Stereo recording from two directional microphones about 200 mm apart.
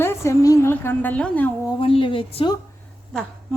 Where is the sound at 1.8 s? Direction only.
25° left (ahead or behind).